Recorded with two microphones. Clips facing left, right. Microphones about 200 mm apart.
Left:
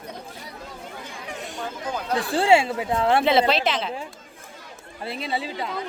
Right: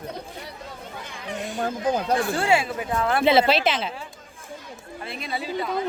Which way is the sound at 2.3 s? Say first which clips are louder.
Left 4 dB; 30° left (ahead or behind).